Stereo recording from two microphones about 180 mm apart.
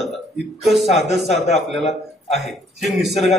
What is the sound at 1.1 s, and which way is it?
Speech, 35° left (ahead or behind).